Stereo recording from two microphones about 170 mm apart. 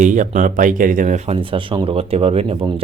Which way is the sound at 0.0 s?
45° right (ahead or behind).